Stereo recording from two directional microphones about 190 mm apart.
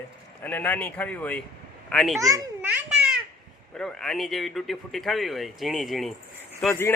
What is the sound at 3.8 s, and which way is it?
Speech, 5° left (ahead or behind).